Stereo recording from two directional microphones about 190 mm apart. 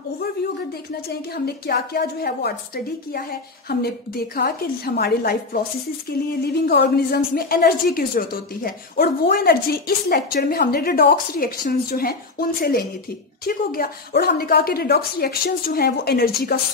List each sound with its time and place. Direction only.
1.3 s a woman's voice: 55° left (ahead or behind)